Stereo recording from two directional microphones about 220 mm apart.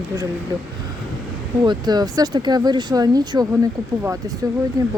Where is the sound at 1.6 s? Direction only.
20° right (ahead or behind).